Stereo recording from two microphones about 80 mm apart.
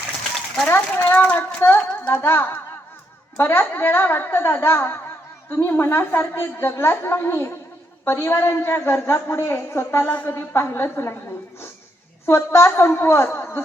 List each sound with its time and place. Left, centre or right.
1.1 s a woman's voice: left
10.1 s a woman's voice: left
10.3 s a woman's voice: left
12.2 s a woman's voice: left